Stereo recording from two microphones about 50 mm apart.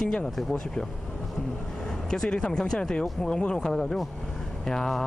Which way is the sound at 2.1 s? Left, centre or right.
Centre.